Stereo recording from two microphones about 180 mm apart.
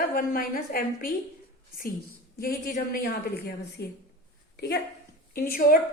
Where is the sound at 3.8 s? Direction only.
70° left (ahead or behind).